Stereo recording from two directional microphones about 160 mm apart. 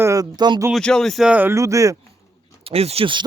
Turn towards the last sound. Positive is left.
turn(degrees=-35)  # may be behind; listen again after turning